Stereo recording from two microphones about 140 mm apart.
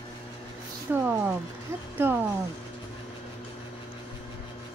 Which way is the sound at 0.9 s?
15° right (ahead or behind).